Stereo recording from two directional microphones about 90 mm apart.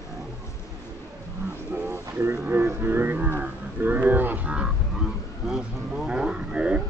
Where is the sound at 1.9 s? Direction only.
30° right (ahead or behind).